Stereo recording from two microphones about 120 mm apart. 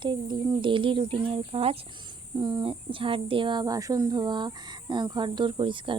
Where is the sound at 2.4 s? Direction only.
40° right (ahead or behind).